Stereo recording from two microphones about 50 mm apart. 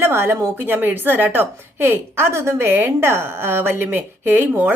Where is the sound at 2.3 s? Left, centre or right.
Right.